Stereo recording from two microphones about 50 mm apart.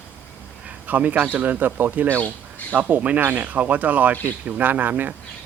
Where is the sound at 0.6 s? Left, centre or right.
Right.